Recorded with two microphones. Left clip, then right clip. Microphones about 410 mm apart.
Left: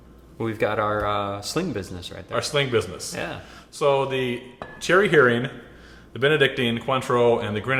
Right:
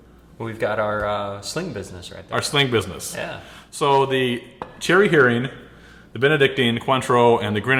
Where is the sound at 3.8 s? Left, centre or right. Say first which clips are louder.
Right 3 dB; centre.